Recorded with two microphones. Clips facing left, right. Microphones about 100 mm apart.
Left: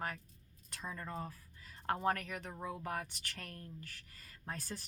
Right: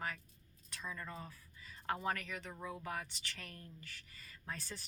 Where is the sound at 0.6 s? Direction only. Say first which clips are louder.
Left 2 dB; 45° left (ahead or behind).